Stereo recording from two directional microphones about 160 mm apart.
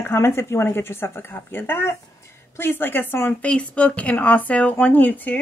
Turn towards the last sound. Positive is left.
turn(degrees=10)  # may be behind; listen again after turning